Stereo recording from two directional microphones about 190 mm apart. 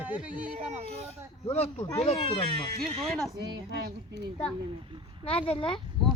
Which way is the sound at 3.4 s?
65° right (ahead or behind).